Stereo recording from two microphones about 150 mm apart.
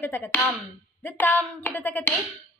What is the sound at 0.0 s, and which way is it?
Speech, 15° left (ahead or behind).